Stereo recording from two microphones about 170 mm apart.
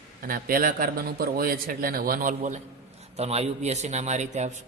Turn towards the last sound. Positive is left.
turn(degrees=-40)  # may be behind; listen again after turning